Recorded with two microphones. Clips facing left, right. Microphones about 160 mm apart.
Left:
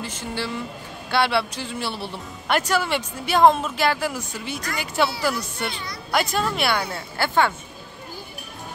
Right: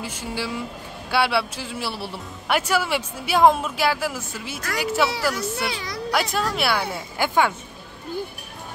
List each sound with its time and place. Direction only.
0.0 s a woman's voice: 10° right (ahead or behind)
5.7 s a woman's voice: 90° right
6.3 s a woman's voice: centre (ahead or behind)